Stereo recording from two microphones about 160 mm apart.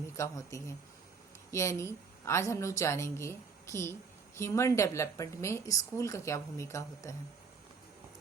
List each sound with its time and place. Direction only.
0.2 s a woman's voice: 20° left (ahead or behind)